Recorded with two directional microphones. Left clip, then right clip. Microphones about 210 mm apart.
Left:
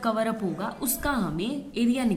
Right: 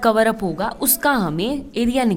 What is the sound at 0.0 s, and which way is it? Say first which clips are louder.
A woman's voice: right 10 dB; 50° right (ahead or behind).